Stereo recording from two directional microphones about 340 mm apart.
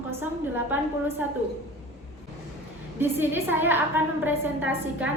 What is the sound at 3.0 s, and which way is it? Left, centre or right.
A woman's voice, centre.